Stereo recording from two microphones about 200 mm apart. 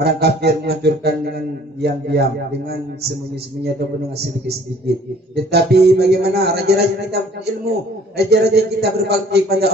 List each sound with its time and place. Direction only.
0.0 s speech: 55° right (ahead or behind)
4.2 s speech: 55° right (ahead or behind)